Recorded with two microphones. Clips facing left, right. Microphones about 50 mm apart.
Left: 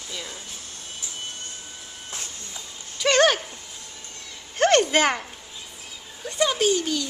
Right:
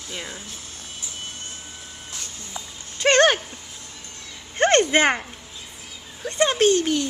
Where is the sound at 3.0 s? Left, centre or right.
Right.